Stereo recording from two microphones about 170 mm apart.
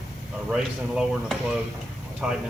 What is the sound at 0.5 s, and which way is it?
Speech, 5° right (ahead or behind).